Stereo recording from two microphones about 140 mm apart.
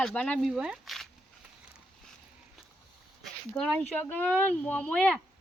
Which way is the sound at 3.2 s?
5° left (ahead or behind).